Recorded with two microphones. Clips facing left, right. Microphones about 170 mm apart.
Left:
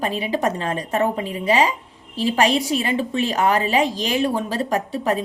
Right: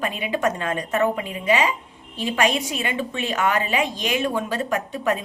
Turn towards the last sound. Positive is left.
turn(degrees=35)  # may be behind; listen again after turning